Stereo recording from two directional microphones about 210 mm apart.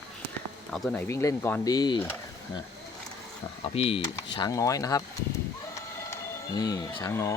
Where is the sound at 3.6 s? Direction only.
30° left (ahead or behind).